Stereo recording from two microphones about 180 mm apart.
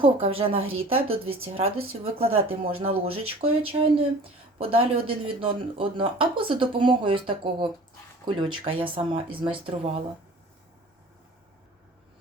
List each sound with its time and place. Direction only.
0.0 s speech: 30° right (ahead or behind)